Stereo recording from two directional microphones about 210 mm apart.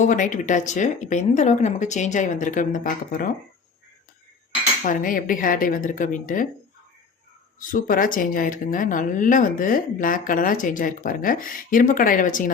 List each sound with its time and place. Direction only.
0.0 s speech: 35° left (ahead or behind)
4.9 s speech: 40° left (ahead or behind)
7.7 s speech: 40° left (ahead or behind)